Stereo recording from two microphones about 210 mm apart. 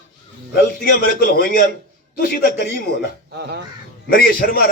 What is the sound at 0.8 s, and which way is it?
A man's voice, 45° left (ahead or behind).